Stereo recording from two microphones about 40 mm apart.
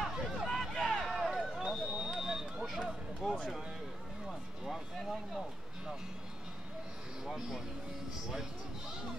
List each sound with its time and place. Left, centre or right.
0.4 s vehicle: centre
1.0 s a sound: centre
1.6 s a sound: centre
2.8 s run: centre
4.3 s music: centre
7.2 s speech: centre